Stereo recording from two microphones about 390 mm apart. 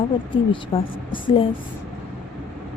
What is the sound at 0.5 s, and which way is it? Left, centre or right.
Speech, centre.